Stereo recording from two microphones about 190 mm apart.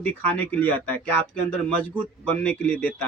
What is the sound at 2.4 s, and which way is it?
Speech, 10° left (ahead or behind).